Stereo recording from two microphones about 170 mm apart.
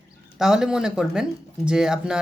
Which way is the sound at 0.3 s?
5° right (ahead or behind).